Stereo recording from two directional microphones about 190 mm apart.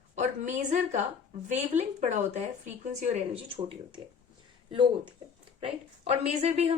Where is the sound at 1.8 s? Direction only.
40° right (ahead or behind).